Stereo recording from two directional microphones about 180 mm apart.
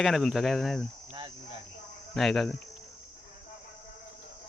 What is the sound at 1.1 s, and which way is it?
Cricket, 30° right (ahead or behind).